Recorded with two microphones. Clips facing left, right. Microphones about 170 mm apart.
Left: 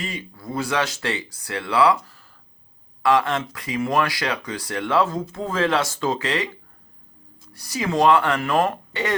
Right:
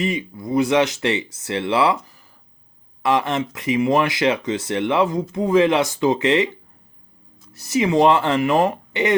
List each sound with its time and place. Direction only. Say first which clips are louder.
0.0 s speech: right 8 dB; 20° right (ahead or behind)
7.5 s speech: right 6 dB; 25° right (ahead or behind)